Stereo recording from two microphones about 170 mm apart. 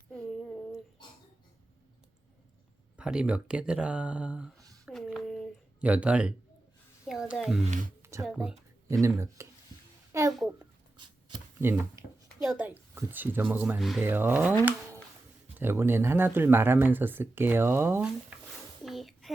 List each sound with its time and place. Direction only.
0.1 s child singing: 5° left (ahead or behind)
2.9 s speech: 5° right (ahead or behind)
4.9 s a sound: centre (ahead or behind)
7.1 s speech: centre (ahead or behind)
7.7 s speech: 50° right (ahead or behind)
8.2 s speech: 5° right (ahead or behind)
8.9 s speech: 15° right (ahead or behind)
10.1 s a sound: 15° right (ahead or behind)
12.4 s speech: 5° right (ahead or behind)
18.9 s a sound: centre (ahead or behind)